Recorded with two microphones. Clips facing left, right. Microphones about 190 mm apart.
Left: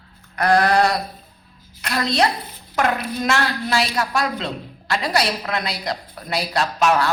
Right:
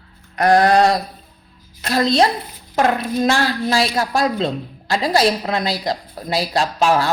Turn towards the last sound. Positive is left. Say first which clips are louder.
# right 2 dB
turn(degrees=-30)  # may be behind; listen again after turning